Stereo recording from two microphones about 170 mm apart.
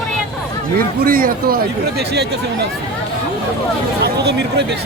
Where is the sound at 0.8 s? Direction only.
60° right (ahead or behind).